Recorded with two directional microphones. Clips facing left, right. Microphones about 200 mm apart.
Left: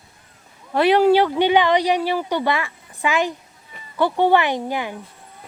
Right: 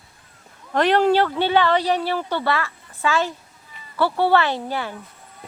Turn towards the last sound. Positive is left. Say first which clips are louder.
# left 2 dB
turn(degrees=15)  # may be behind; listen again after turning